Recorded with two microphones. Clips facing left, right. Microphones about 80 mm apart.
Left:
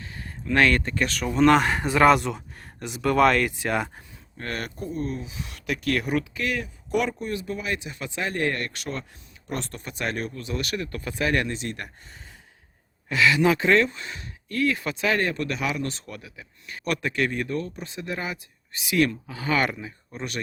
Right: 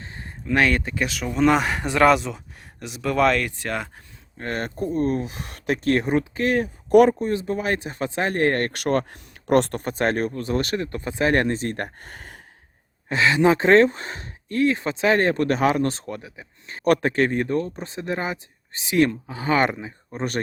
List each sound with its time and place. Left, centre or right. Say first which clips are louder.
0.0 s a sound: right 1 dB; right
0.4 s speech: even; centre
4.4 s speech: right 4 dB; right
4.8 s speech: right 11 dB; right
9.8 s speech: right 7 dB; right
12.0 s gasp: right 7 dB; right
13.1 s speech: right 2 dB; right